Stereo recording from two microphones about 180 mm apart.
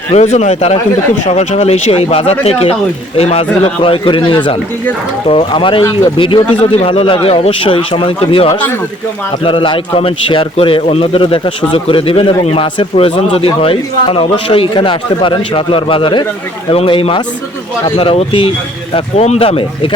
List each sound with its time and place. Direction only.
0.1 s a man's voice: 40° left (ahead or behind)